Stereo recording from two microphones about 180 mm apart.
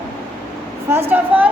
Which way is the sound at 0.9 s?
10° right (ahead or behind).